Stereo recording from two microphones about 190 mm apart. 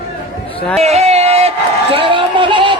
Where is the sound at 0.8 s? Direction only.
35° right (ahead or behind).